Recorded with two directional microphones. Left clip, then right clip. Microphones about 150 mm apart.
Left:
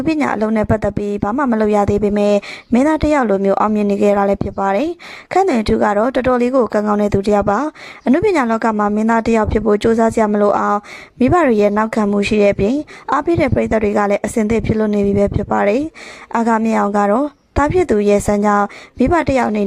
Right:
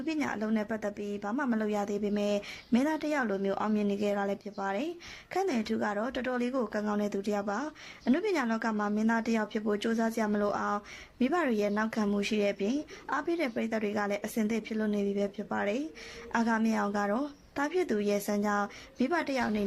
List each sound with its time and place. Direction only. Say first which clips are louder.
0.0 s a woman's voice: left 17 dB; 50° left (ahead or behind)